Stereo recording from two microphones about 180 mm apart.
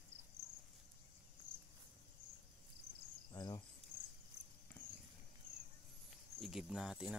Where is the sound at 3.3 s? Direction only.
25° left (ahead or behind).